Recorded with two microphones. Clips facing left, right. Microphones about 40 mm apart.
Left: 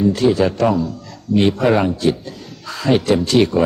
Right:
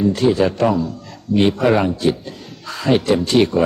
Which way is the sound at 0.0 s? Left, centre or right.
Centre.